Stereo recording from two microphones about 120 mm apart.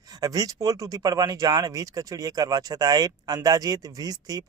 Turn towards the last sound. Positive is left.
turn(degrees=-30)  # may be behind; listen again after turning